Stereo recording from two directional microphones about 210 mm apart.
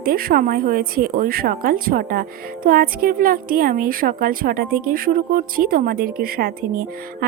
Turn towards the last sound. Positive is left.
turn(degrees=-45)  # may be behind; listen again after turning